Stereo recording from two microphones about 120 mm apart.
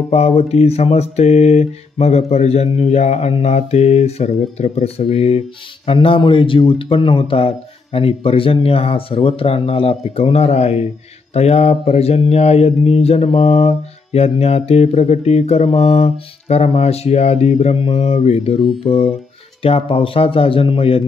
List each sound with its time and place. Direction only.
0.1 s mantra: 60° left (ahead or behind)
5.9 s a man's voice: 45° left (ahead or behind); by 10.9 s 60° left (ahead or behind)
11.3 s mantra: 60° left (ahead or behind)
18.9 s a man's voice: 50° left (ahead or behind)